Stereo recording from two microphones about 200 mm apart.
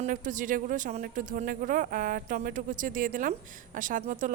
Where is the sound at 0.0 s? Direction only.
40° right (ahead or behind).